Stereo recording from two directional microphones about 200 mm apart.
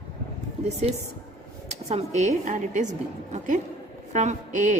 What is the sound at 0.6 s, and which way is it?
Speech, 30° right (ahead or behind).